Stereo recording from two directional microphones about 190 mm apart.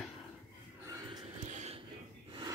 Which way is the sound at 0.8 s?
20° right (ahead or behind).